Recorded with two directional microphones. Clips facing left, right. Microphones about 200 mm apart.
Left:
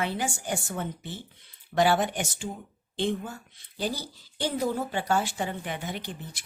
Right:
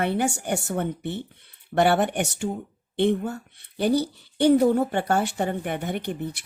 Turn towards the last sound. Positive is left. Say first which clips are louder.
# right 9 dB
turn(degrees=-60)  # may be behind; listen again after turning